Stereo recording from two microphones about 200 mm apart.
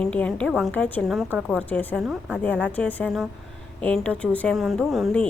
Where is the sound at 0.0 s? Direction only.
5° left (ahead or behind).